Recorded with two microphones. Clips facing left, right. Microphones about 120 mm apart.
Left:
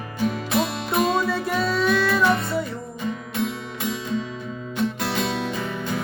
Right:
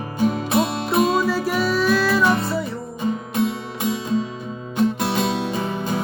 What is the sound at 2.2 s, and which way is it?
Music, 25° right (ahead or behind).